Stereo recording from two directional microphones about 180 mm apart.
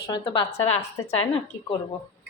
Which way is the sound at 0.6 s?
35° left (ahead or behind).